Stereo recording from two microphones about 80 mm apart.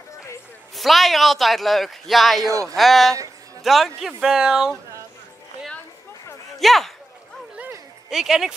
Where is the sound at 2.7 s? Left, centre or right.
Centre.